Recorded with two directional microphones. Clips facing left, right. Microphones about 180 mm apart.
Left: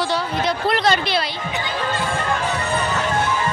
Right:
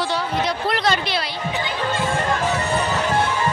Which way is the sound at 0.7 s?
25° left (ahead or behind).